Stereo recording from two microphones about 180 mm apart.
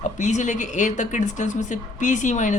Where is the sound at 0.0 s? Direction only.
40° left (ahead or behind).